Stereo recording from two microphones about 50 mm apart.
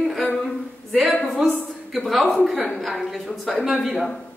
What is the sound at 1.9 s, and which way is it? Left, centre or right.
A woman's voice, centre.